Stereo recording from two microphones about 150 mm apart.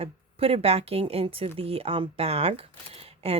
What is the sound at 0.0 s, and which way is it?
Speech, 40° right (ahead or behind).